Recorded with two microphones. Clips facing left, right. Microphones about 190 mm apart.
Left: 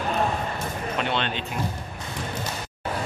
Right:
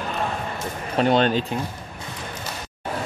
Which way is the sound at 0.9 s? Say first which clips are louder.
Right 10 dB; 40° right (ahead or behind).